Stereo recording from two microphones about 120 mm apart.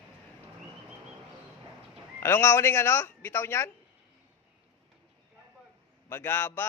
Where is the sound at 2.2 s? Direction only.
20° left (ahead or behind).